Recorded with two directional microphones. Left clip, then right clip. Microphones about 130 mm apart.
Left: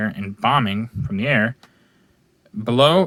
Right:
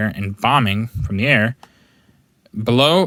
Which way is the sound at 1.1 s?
40° right (ahead or behind).